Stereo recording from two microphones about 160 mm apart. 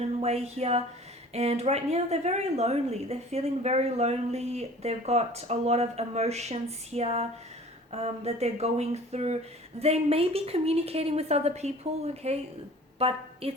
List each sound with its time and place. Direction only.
0.0 s a woman's voice: 40° right (ahead or behind)